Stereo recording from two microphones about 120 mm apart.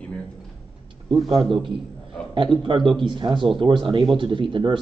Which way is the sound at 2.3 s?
45° right (ahead or behind).